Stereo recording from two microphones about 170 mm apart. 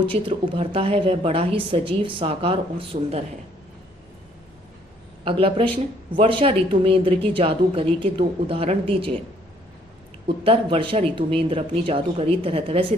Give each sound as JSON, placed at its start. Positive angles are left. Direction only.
{"t": 0.0, "sound": "a woman's voice", "side_deg": -30}
{"t": 5.2, "sound": "a woman's voice", "side_deg": -30}
{"t": 10.2, "sound": "a woman's voice", "side_deg": -30}